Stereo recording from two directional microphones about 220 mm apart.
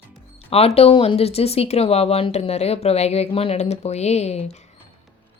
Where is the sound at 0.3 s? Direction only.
25° left (ahead or behind).